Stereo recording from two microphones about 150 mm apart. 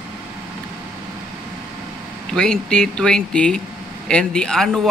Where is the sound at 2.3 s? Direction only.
5° left (ahead or behind).